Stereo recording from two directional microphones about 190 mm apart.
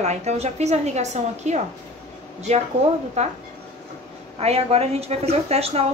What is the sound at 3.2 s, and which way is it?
Speech, 35° right (ahead or behind).